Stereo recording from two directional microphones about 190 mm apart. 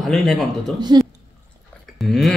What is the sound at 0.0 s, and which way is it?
Speech, centre (ahead or behind).